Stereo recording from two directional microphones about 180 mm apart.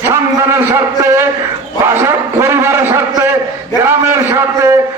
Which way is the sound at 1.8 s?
15° right (ahead or behind).